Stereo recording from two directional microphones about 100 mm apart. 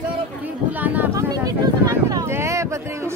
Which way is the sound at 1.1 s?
40° right (ahead or behind).